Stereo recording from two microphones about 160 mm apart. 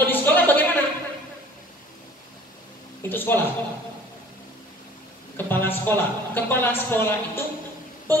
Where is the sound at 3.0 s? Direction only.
15° left (ahead or behind).